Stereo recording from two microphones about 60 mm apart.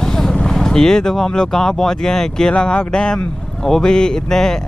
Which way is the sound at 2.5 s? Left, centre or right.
Centre.